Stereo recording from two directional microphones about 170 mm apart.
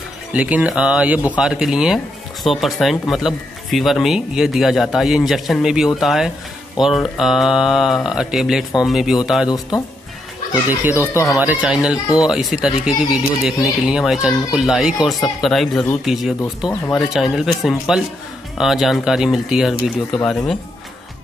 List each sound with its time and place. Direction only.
0.3 s speech: 10° right (ahead or behind)
9.5 s speech: 25° left (ahead or behind)
10.7 s speech: 10° right (ahead or behind)